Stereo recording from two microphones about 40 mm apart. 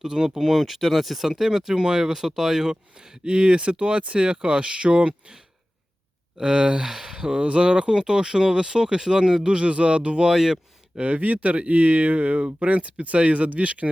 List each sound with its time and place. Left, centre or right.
0.0 s speech: centre
3.2 s speech: right
6.3 s speech: centre
10.2 s speech: centre
11.0 s speech: right